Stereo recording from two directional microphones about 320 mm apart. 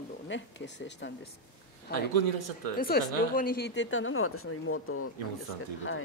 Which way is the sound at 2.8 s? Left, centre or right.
Left.